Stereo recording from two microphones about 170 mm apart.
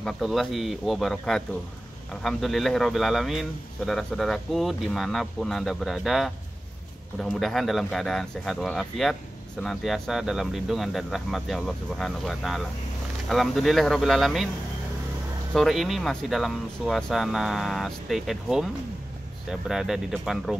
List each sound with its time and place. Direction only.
0.0 s a man's voice: centre (ahead or behind)
15.5 s a man's voice: centre (ahead or behind)
19.7 s a man's voice: 5° right (ahead or behind)